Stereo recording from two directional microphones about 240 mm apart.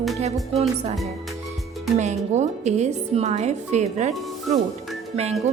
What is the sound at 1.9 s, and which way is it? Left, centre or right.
A woman's voice, right.